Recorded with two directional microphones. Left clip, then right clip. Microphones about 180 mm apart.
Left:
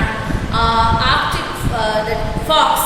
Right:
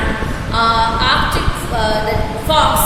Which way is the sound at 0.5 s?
10° right (ahead or behind).